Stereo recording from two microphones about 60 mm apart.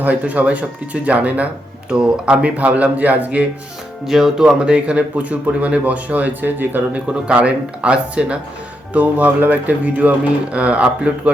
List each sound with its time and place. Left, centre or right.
0.0 s speech: right
4.0 s speech: centre; by 7.0 s right
7.1 s speech: centre